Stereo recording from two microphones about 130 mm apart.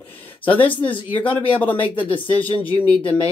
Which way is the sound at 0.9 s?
40° left (ahead or behind).